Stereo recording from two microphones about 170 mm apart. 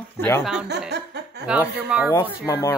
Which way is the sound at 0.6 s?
80° right.